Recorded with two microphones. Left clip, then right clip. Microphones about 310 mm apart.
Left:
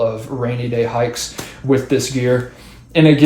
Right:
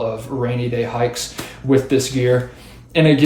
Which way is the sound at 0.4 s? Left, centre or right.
Centre.